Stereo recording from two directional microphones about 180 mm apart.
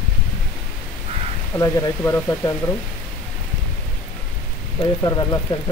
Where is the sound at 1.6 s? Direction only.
20° left (ahead or behind).